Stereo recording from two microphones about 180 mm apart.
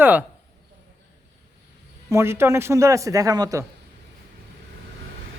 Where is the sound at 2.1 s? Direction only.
15° right (ahead or behind).